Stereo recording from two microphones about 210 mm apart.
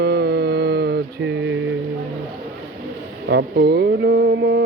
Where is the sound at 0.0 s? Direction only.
50° right (ahead or behind).